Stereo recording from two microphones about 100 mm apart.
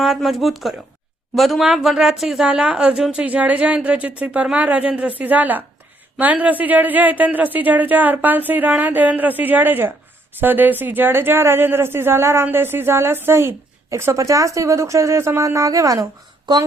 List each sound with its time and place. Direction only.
0.0 s a woman's voice: centre (ahead or behind); by 16.0 s 35° right (ahead or behind)